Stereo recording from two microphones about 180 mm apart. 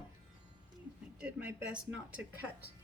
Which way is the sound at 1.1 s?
5° right (ahead or behind).